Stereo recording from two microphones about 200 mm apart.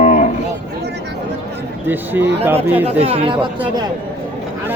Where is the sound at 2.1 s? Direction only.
10° right (ahead or behind).